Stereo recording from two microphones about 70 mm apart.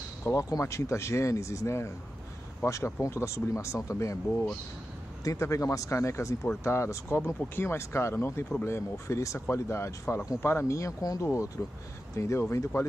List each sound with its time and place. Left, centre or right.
0.2 s speech: left
11.0 s speech: left
12.2 s speech: left